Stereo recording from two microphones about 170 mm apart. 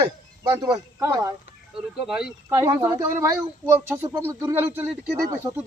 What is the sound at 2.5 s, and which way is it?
A man's voice, 20° right (ahead or behind).